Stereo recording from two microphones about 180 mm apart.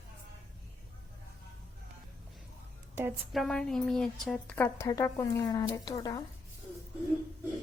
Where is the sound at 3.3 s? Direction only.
Centre (ahead or behind); by 6.2 s 20° left (ahead or behind).